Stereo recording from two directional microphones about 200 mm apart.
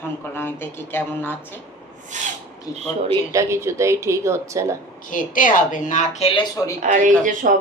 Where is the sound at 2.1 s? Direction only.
35° right (ahead or behind).